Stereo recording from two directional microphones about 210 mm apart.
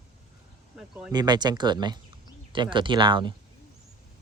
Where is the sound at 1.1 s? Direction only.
20° right (ahead or behind).